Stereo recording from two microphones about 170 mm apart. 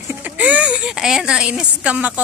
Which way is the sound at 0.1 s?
10° right (ahead or behind).